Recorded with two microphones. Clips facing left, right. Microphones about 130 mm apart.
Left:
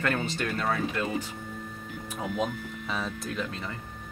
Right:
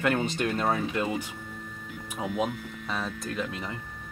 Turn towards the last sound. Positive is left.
turn(degrees=0)  # may be behind; listen again after turning